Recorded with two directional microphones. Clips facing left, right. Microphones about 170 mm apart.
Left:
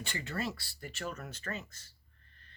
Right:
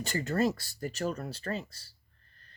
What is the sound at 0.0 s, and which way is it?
Speech, 40° right (ahead or behind).